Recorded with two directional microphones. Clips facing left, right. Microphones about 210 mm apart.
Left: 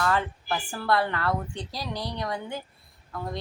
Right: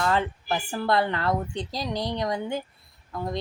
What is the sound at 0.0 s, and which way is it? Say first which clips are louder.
Speech: right 2 dB; 25° right (ahead or behind).